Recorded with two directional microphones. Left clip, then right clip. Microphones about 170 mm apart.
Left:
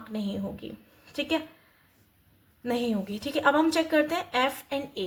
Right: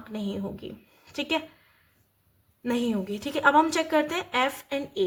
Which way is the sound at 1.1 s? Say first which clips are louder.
Even; 25° right (ahead or behind).